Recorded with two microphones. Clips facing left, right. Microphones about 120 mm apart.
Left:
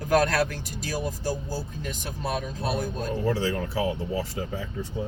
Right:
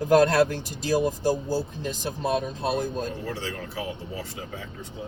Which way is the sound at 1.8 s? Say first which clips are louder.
Right 4 dB; 25° right (ahead or behind).